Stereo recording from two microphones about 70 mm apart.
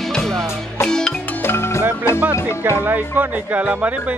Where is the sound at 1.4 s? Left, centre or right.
Left.